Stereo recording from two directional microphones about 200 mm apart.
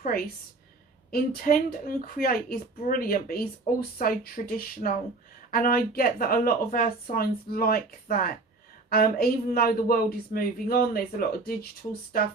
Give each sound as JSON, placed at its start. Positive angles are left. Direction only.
{"t": 0.1, "sound": "speech", "side_deg": 50}